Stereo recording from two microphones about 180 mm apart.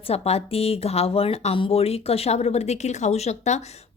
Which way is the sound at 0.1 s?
35° left (ahead or behind).